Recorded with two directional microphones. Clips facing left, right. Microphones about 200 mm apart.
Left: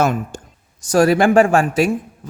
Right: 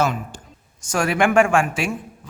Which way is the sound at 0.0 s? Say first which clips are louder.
Left 4 dB; 50° left (ahead or behind).